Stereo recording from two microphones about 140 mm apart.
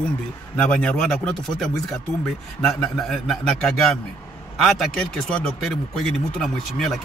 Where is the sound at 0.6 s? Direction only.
10° left (ahead or behind).